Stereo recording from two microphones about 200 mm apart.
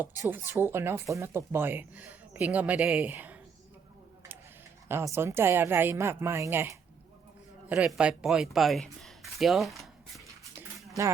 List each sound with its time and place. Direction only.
0.0 s speech: 10° right (ahead or behind)
4.9 s speech: 10° right (ahead or behind)
9.4 s a sound: centre (ahead or behind)
11.0 s speech: 15° right (ahead or behind)